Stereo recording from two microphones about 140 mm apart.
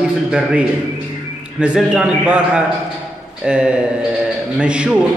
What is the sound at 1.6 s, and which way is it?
A man's voice, 5° right (ahead or behind).